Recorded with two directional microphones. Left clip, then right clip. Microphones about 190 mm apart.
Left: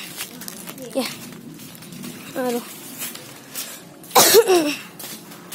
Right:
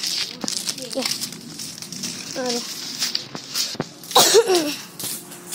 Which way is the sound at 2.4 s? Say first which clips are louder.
Left 2 dB; 20° left (ahead or behind).